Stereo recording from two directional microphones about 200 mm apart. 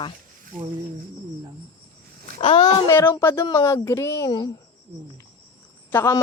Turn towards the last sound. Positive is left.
turn(degrees=10)  # may be behind; listen again after turning